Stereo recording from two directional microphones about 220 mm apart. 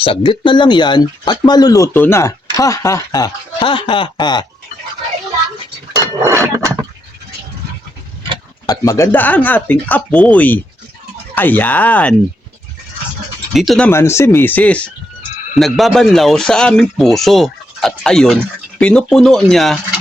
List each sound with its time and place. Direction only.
0.0 s speech: 25° left (ahead or behind)
6.2 s a sound: 15° right (ahead or behind)
8.6 s speech: 15° left (ahead or behind)
13.5 s speech: centre (ahead or behind)